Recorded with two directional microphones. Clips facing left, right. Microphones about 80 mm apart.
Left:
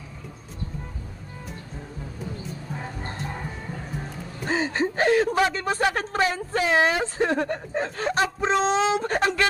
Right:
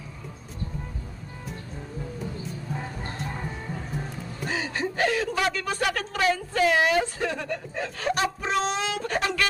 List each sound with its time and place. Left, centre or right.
4.4 s speech: left